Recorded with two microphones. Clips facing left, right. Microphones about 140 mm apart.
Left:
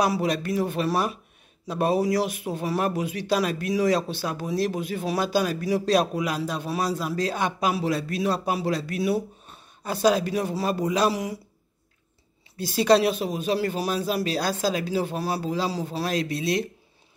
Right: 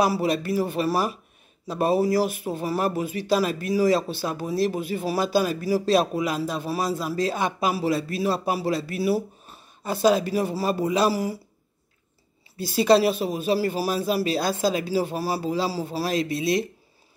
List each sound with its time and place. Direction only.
0.0 s speech: 5° right (ahead or behind)
12.7 s speech: centre (ahead or behind)